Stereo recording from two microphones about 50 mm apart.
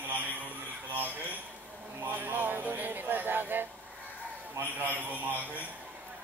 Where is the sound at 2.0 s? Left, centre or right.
Right.